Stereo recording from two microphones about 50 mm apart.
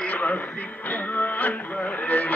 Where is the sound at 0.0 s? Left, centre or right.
Left.